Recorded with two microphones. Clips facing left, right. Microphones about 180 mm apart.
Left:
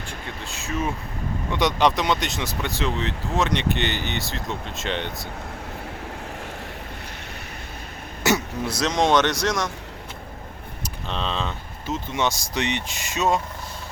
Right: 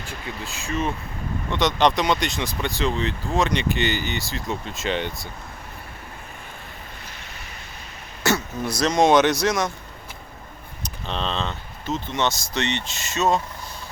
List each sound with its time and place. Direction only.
0.1 s speech: 5° right (ahead or behind)
8.2 s throat clearing: 15° left (ahead or behind)
8.8 s speech: 5° right (ahead or behind)
11.0 s speech: centre (ahead or behind)